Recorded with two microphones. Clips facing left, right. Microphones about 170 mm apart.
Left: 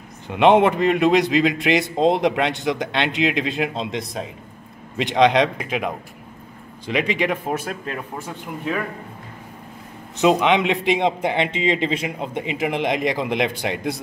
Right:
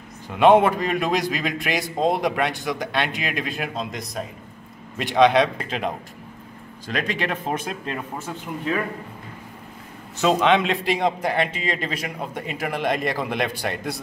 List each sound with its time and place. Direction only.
0.4 s a man's voice: 20° left (ahead or behind)
5.0 s a man's voice: 15° left (ahead or behind)
10.1 s a man's voice: 15° left (ahead or behind)